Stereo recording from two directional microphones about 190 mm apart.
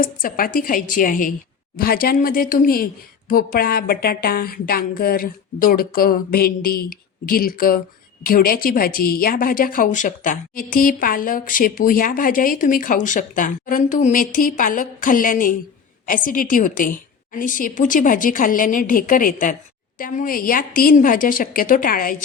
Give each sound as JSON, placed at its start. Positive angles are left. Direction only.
{"t": 0.0, "sound": "a woman's voice", "side_deg": 50}